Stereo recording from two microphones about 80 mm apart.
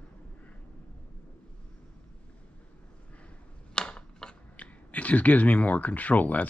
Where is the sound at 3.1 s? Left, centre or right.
Centre.